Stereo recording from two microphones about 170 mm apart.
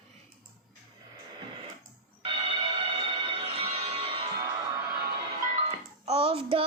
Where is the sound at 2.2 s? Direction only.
35° right (ahead or behind).